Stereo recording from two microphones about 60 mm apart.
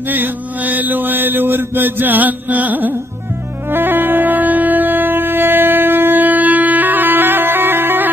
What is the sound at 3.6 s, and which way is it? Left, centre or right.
Wind instrument, right.